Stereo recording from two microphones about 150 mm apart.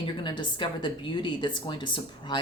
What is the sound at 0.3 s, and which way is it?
Speech, 30° left (ahead or behind).